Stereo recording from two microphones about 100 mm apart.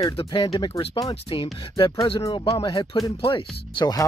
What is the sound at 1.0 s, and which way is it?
Speech, 55° left (ahead or behind).